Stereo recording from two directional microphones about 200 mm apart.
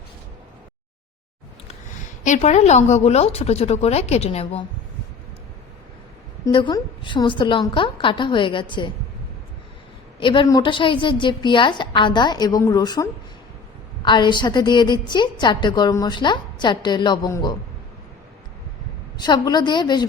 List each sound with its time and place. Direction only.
2.2 s a woman's voice: 35° left (ahead or behind)
6.4 s a woman's voice: 25° left (ahead or behind)
10.2 s a woman's voice: 25° left (ahead or behind)
19.1 s a woman's voice: 20° left (ahead or behind)